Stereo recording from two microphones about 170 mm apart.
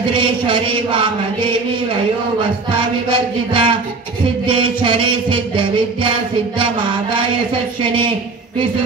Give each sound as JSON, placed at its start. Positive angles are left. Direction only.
{"t": 0.1, "sound": "music", "side_deg": -30}
{"t": 3.1, "sound": "music", "side_deg": -30}
{"t": 7.8, "sound": "music", "side_deg": -30}